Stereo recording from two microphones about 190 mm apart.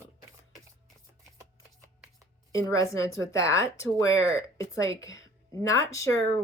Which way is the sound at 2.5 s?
15° left (ahead or behind).